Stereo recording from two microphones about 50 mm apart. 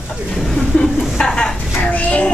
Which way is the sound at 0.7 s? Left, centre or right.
Left.